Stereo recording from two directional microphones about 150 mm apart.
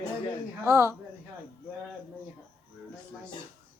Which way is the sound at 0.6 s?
20° right (ahead or behind).